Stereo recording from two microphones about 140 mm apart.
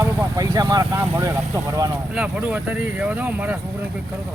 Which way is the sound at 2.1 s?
10° right (ahead or behind).